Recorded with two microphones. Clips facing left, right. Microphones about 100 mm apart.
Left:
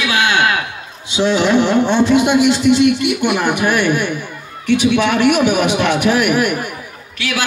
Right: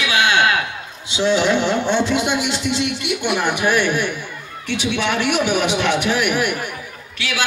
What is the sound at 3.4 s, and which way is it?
A man's voice, 50° left (ahead or behind).